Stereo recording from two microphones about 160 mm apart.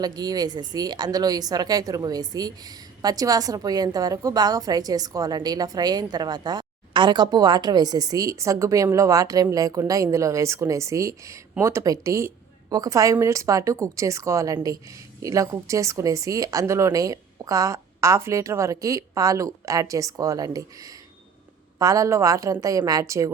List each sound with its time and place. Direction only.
0.0 s a woman's voice: 25° right (ahead or behind)